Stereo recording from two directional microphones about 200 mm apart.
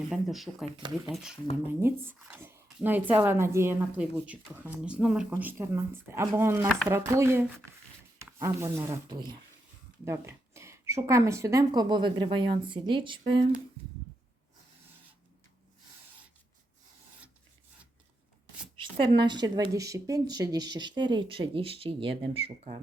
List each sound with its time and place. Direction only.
0.1 s speech: centre (ahead or behind); by 13.4 s 25° right (ahead or behind)
18.8 s speech: 25° right (ahead or behind)